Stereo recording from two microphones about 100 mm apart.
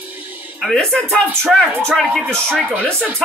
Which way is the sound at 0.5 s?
5° left (ahead or behind).